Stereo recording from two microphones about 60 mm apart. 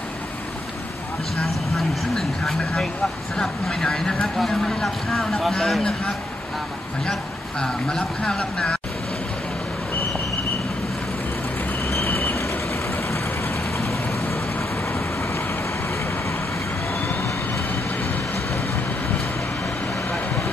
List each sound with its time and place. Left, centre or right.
1.8 s speech: centre
8.0 s speech: centre
11.8 s vehicle: left